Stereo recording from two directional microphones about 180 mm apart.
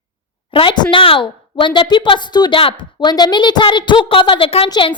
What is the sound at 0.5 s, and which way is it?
A woman's voice, 25° left (ahead or behind).